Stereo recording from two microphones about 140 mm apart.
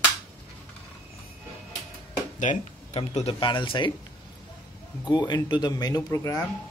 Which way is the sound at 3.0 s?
45° left (ahead or behind).